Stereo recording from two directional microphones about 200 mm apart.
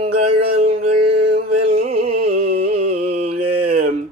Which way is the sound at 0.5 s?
30° right (ahead or behind).